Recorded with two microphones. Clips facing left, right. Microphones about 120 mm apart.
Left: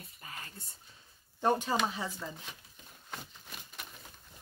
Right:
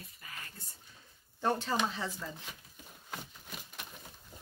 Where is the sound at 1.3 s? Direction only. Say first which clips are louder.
Left 2 dB; 15° left (ahead or behind).